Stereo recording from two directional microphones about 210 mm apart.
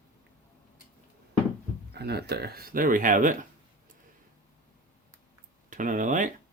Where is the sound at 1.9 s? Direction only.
50° right (ahead or behind).